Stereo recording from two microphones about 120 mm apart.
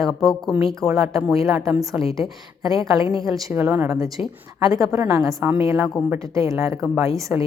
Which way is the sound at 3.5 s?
20° right (ahead or behind).